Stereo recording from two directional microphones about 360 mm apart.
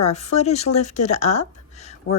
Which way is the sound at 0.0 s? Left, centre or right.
Centre.